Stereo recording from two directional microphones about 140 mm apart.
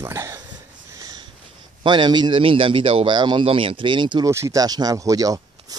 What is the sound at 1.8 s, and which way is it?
Speech, 35° right (ahead or behind).